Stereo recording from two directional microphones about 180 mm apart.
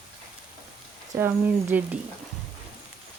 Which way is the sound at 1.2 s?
10° right (ahead or behind).